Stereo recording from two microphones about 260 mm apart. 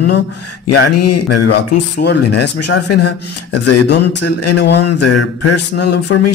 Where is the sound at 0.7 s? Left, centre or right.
Left.